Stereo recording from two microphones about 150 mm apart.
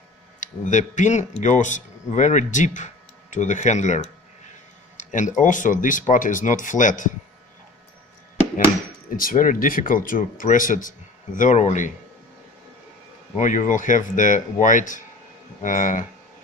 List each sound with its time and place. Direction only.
0.3 s speech: 55° left (ahead or behind)
9.0 s speech: 70° left (ahead or behind); by 11.9 s 55° left (ahead or behind)
13.3 s speech: 55° left (ahead or behind)